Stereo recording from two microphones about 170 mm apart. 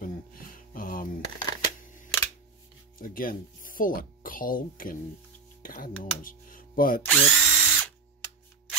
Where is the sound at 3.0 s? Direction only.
55° left (ahead or behind).